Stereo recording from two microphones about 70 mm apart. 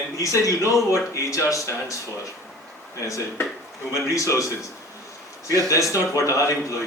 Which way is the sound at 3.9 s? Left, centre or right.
Left.